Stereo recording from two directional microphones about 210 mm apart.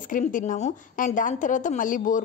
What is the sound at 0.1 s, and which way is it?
A woman's voice, 40° left (ahead or behind).